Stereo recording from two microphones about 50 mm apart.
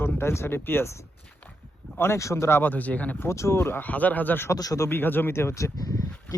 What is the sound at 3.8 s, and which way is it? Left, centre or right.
Speech, left.